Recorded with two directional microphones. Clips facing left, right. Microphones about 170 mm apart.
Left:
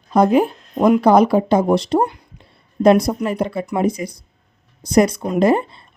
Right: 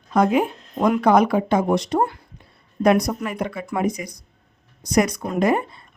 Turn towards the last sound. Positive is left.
turn(degrees=30)  # may be behind; listen again after turning